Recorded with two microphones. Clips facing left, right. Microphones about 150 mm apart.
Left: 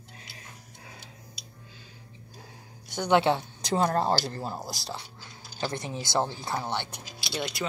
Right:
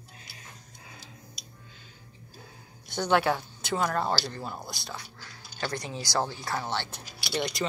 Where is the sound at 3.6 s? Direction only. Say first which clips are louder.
Left 3 dB; 35° left (ahead or behind); by 7.3 s 15° left (ahead or behind).